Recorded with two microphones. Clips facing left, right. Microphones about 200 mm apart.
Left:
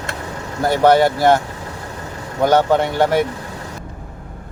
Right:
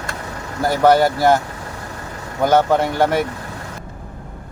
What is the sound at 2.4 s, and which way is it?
Speech, centre (ahead or behind).